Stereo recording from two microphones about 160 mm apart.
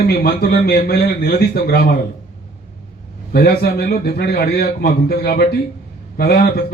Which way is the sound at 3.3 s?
75° left (ahead or behind).